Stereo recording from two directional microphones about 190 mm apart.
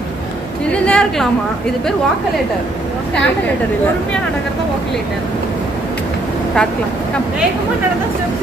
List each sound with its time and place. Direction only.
0.7 s a woman's voice: 5° left (ahead or behind)